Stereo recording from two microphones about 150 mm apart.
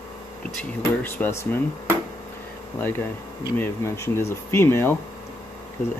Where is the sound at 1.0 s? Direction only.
15° left (ahead or behind).